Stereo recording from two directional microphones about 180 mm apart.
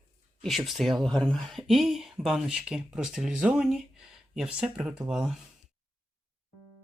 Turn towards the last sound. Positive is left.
turn(degrees=-5)  # may be behind; listen again after turning